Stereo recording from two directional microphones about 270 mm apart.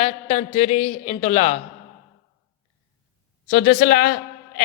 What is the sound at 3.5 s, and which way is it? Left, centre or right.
A man's voice, left.